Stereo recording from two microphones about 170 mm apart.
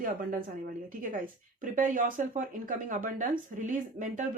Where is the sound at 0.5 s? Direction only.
55° right (ahead or behind).